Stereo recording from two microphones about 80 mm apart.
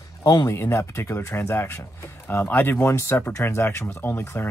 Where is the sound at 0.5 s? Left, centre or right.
Left.